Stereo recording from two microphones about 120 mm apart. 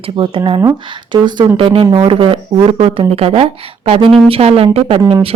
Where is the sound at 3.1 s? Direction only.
55° right (ahead or behind).